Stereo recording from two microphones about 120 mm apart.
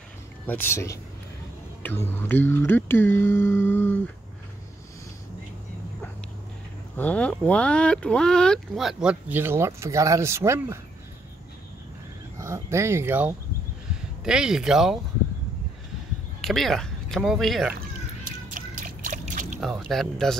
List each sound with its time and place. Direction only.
0.5 s speech: 20° left (ahead or behind)
7.0 s speech: 10° left (ahead or behind)
9.3 s speech: 20° right (ahead or behind)
12.4 s speech: 25° right (ahead or behind)
14.2 s speech: 5° right (ahead or behind)
16.3 s speech: centre (ahead or behind)
19.0 s a sound: 90° right
19.6 s speech: centre (ahead or behind)